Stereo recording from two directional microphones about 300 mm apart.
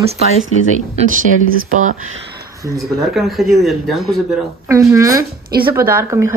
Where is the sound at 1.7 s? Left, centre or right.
Right.